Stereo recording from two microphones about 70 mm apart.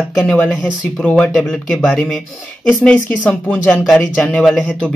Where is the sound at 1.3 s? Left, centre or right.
Centre.